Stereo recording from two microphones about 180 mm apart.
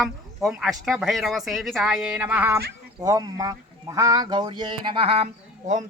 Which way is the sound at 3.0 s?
20° right (ahead or behind).